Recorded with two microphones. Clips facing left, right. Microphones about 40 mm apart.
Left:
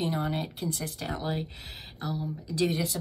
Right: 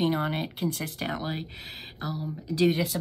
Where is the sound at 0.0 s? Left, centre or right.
Right.